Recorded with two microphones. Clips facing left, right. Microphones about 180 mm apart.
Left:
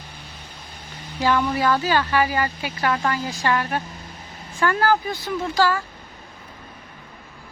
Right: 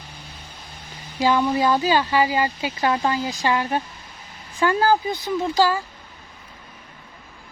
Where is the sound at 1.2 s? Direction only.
20° right (ahead or behind).